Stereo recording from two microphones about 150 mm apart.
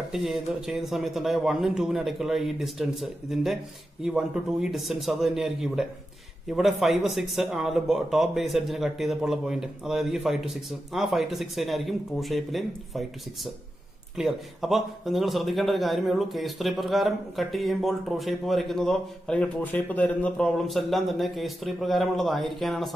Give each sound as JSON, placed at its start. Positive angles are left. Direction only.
{"t": 0.1, "sound": "a man's voice", "side_deg": 0}